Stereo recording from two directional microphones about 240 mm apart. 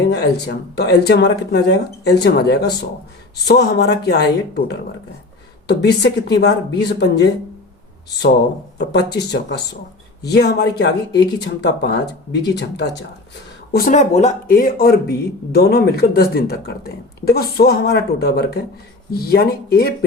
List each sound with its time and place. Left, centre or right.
0.1 s speech: left
8.8 s speech: left
13.7 s speech: left